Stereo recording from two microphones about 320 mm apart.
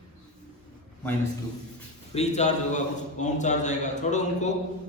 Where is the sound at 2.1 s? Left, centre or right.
Left.